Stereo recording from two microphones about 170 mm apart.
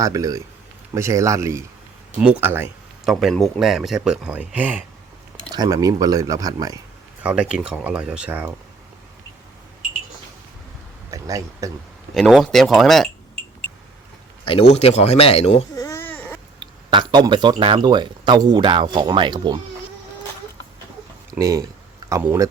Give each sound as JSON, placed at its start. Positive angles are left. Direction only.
{"t": 0.0, "sound": "a man's voice", "side_deg": -20}
{"t": 3.0, "sound": "a man's voice", "side_deg": 0}
{"t": 5.5, "sound": "speech", "side_deg": -20}
{"t": 7.2, "sound": "a man's voice", "side_deg": -5}
{"t": 11.1, "sound": "speech", "side_deg": -20}
{"t": 12.1, "sound": "a man's voice", "side_deg": 0}
{"t": 14.7, "sound": "speech", "side_deg": 40}
{"t": 15.7, "sound": "baby cry", "side_deg": 20}
{"t": 16.9, "sound": "speech", "side_deg": -25}
{"t": 21.3, "sound": "a man's voice", "side_deg": -20}